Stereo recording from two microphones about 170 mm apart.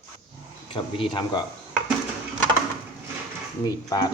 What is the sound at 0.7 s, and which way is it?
Speech, 25° left (ahead or behind).